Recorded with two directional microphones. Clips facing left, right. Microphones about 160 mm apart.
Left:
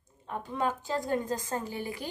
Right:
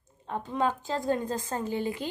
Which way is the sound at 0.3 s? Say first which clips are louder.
Right 3 dB; 20° right (ahead or behind).